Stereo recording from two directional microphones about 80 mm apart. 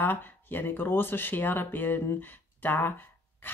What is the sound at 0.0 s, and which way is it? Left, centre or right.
Speech, left.